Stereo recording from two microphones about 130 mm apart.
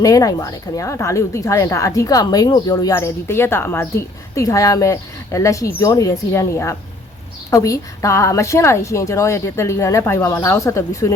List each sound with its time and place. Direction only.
0.0 s speech: 25° left (ahead or behind)
2.9 s speech: 20° left (ahead or behind)